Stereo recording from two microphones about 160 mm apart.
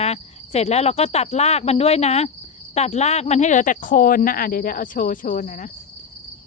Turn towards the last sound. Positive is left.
turn(degrees=55)  # may be behind; listen again after turning